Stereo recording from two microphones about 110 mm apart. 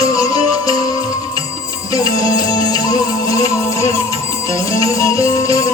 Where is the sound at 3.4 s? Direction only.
30° left (ahead or behind).